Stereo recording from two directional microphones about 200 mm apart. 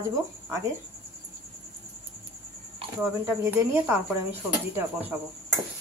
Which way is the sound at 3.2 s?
10° right (ahead or behind).